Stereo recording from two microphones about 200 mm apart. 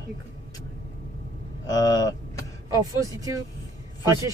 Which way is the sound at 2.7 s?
15° right (ahead or behind).